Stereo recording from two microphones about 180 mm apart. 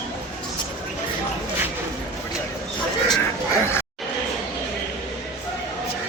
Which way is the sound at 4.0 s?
Centre (ahead or behind).